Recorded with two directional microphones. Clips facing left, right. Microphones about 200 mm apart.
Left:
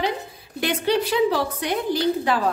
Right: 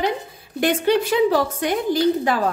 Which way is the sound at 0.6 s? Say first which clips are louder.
Right 4 dB; 50° right (ahead or behind).